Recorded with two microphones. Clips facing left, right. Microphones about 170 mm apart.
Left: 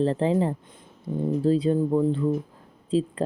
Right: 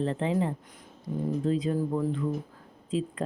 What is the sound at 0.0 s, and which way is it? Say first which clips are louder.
Speech: left 5 dB; 35° left (ahead or behind).